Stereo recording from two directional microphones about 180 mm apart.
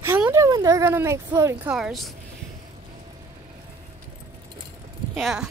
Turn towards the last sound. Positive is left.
turn(degrees=0)  # may be behind; listen again after turning